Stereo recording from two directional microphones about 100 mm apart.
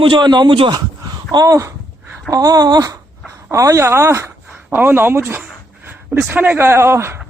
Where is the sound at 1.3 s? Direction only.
40° right (ahead or behind).